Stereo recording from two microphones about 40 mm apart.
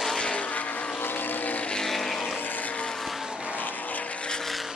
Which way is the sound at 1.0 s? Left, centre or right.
Left.